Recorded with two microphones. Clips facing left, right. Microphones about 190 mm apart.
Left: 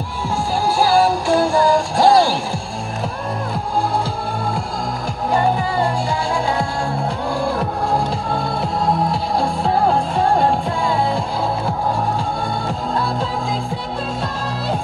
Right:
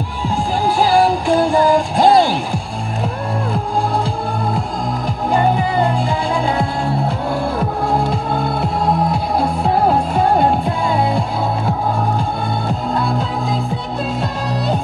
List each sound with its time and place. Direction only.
0.7 s music: 15° right (ahead or behind)